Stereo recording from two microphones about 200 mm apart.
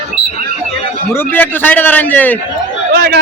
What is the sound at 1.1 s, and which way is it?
A man's voice, 10° left (ahead or behind).